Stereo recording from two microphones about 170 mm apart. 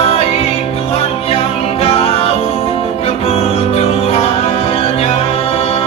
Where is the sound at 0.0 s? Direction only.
35° left (ahead or behind).